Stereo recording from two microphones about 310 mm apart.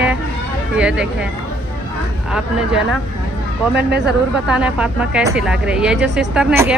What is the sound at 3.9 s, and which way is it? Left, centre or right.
Speech, right.